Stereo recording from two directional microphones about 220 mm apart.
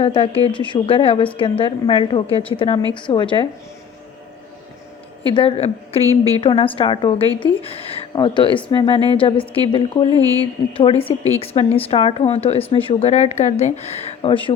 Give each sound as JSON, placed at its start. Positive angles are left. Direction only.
{"t": 0.0, "sound": "speech", "side_deg": 25}
{"t": 5.3, "sound": "speech", "side_deg": 25}